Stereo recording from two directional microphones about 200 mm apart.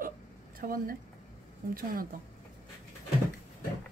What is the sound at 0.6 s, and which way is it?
Speech, 45° right (ahead or behind).